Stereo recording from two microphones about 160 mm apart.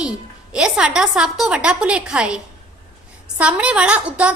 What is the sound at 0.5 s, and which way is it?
A woman's voice, 5° right (ahead or behind).